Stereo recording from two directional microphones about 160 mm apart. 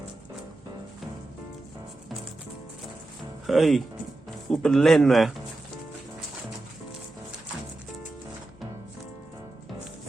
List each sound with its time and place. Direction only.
3.4 s a man's voice: centre (ahead or behind)